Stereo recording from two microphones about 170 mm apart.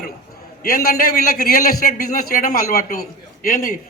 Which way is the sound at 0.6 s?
60° left (ahead or behind).